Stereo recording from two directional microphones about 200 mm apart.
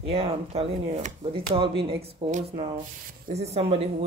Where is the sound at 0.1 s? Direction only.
30° right (ahead or behind).